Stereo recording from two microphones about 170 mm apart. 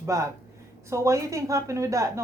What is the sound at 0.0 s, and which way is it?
Speech, 20° right (ahead or behind).